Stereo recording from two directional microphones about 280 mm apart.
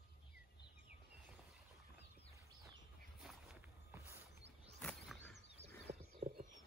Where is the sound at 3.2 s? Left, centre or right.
Centre.